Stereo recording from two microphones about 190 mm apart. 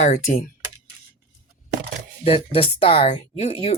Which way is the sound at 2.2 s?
30° left (ahead or behind).